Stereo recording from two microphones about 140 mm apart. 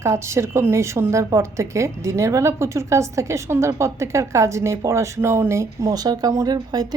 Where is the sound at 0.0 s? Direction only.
20° right (ahead or behind).